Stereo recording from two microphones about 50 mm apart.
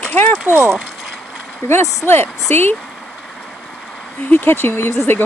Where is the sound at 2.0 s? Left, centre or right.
Left.